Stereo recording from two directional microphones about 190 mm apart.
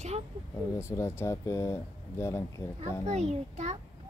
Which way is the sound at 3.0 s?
35° right (ahead or behind).